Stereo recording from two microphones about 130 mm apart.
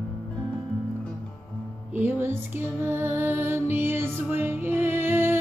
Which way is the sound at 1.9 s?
15° right (ahead or behind).